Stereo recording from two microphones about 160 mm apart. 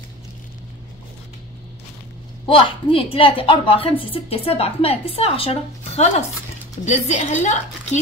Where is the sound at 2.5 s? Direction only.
35° left (ahead or behind).